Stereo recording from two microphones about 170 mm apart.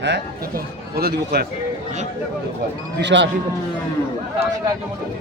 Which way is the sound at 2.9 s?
90° right.